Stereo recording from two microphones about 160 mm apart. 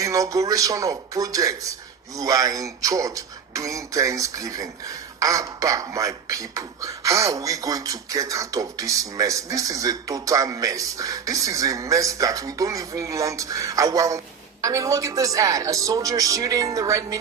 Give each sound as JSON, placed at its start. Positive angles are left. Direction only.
{"t": 0.0, "sound": "speech", "side_deg": -20}